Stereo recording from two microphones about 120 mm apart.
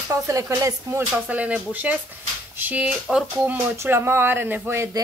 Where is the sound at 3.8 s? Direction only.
20° right (ahead or behind).